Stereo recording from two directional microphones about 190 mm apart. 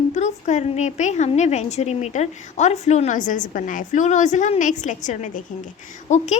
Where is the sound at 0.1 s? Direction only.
40° left (ahead or behind).